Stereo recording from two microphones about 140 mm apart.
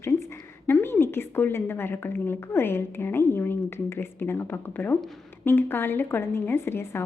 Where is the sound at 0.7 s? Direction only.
15° left (ahead or behind).